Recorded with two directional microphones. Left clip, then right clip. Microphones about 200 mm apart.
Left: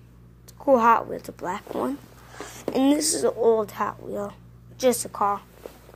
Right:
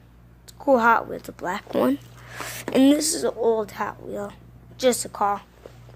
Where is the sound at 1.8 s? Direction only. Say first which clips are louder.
Right 6 dB; 35° right (ahead or behind).